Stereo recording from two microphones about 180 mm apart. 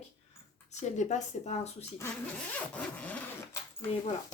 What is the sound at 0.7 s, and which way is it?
A woman's voice, 40° left (ahead or behind).